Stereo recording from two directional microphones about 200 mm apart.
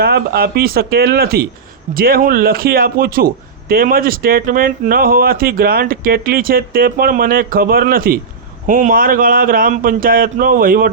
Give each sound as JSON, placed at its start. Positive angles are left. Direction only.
{"t": 0.0, "sound": "speech", "side_deg": -50}